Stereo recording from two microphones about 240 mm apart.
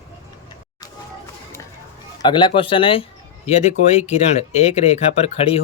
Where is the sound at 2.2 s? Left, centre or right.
Centre.